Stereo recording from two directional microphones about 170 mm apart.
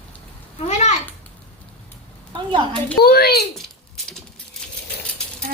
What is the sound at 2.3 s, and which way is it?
Speech, 30° right (ahead or behind).